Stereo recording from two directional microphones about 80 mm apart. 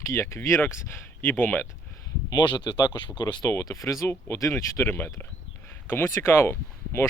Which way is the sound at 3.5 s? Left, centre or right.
Left.